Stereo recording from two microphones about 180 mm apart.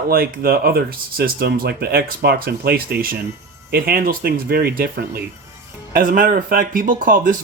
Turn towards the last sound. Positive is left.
turn(degrees=-50)  # may be behind; listen again after turning